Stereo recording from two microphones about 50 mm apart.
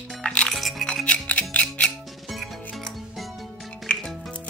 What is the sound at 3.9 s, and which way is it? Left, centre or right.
Music, left.